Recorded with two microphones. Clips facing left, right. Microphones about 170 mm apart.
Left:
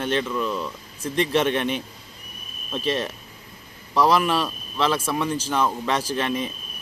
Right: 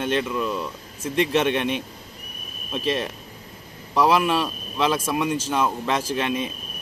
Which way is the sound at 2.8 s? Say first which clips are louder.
Even; 30° left (ahead or behind).